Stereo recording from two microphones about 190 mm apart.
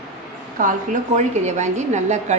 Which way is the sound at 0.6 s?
45° right (ahead or behind).